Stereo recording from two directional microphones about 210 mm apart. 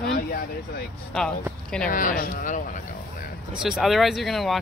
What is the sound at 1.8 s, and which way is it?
Speech, 40° left (ahead or behind).